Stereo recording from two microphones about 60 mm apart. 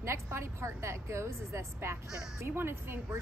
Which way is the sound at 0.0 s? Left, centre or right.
Right.